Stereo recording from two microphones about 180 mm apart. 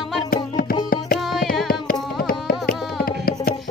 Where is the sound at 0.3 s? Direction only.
55° left (ahead or behind).